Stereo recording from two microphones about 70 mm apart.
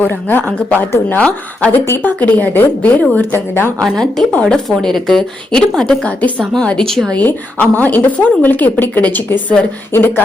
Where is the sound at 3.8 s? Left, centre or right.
Centre.